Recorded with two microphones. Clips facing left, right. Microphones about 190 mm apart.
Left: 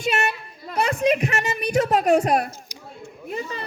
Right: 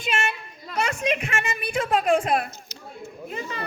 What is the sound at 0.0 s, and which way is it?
Speech, 40° left (ahead or behind).